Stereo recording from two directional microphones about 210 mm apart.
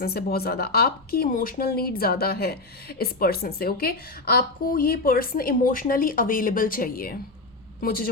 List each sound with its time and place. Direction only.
0.0 s speech: 45° left (ahead or behind)